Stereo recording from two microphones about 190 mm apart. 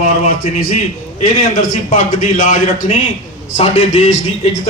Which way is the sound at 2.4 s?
45° left (ahead or behind).